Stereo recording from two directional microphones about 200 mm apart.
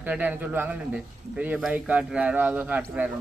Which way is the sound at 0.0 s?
10° right (ahead or behind).